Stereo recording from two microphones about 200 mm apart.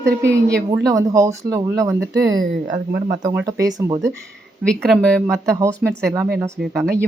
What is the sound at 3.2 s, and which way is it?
Speech, 15° right (ahead or behind).